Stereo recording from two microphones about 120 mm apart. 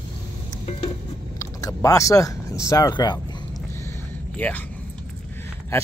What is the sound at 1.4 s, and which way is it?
Speech, 30° left (ahead or behind).